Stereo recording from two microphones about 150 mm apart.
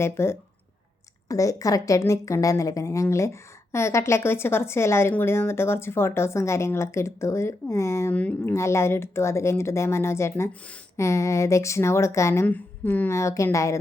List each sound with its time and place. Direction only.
0.0 s a woman's voice: 15° left (ahead or behind)